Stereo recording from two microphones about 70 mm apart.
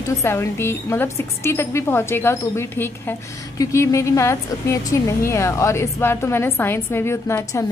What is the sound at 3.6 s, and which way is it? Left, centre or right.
A woman's voice, left.